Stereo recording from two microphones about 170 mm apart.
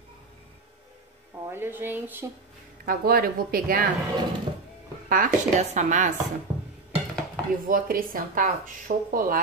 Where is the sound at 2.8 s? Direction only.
60° right (ahead or behind).